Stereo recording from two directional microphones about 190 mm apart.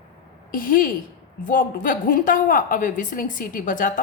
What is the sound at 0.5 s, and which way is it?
A woman's voice, 50° left (ahead or behind).